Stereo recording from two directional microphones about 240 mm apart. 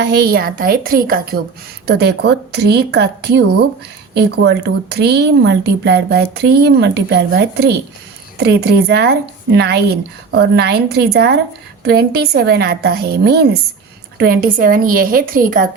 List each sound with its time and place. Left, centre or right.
0.0 s a woman's voice: right